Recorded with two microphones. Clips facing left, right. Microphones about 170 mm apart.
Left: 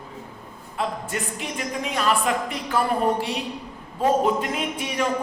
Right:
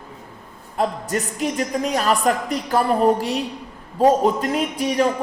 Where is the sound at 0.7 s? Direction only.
40° right (ahead or behind).